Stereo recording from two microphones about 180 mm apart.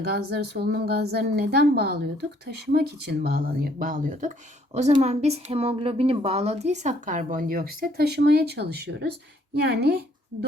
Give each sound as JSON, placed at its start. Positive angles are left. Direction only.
{"t": 0.0, "sound": "a woman's voice", "side_deg": -60}